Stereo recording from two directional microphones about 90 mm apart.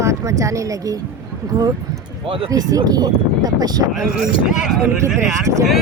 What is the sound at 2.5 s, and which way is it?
Speech, 40° right (ahead or behind).